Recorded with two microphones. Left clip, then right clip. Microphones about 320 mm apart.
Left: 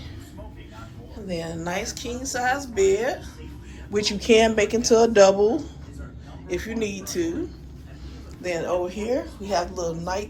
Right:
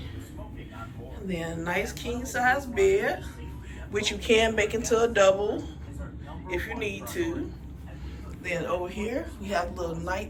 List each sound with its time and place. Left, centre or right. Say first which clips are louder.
1.3 s a woman's voice: left 2 dB; centre
8.4 s a woman's voice: left 4 dB; centre